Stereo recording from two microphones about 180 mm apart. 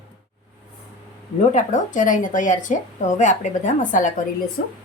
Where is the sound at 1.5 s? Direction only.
45° left (ahead or behind).